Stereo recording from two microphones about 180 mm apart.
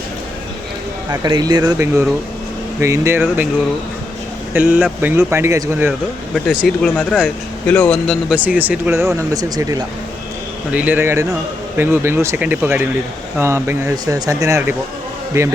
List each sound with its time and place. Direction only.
1.1 s speech: 20° right (ahead or behind)
4.5 s speech: 10° right (ahead or behind)
6.3 s speech: centre (ahead or behind)
8.4 s speech: 10° right (ahead or behind)
10.7 s speech: 10° right (ahead or behind)